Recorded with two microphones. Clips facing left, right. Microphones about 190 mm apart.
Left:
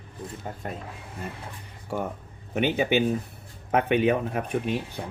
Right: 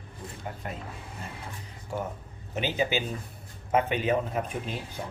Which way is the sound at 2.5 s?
60° left (ahead or behind).